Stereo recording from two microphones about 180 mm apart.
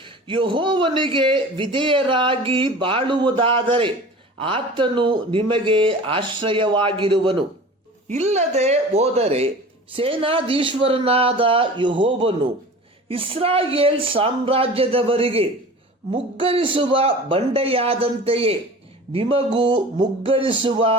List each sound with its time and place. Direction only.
0.0 s speech: 25° right (ahead or behind)
8.0 s speech: 40° right (ahead or behind)